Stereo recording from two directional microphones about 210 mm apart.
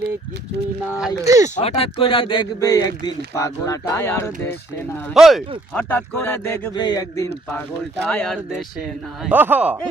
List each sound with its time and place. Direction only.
1.2 s speech: 15° right (ahead or behind)
1.5 s speech: 30° left (ahead or behind); by 4.5 s 10° left (ahead or behind)
5.1 s speech: centre (ahead or behind)
5.7 s speech: 10° left (ahead or behind)
8.0 s speech: 5° left (ahead or behind)
9.2 s speech: 10° right (ahead or behind)